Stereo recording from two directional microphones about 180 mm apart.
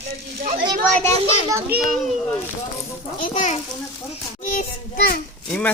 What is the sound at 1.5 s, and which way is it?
Speech, 15° right (ahead or behind).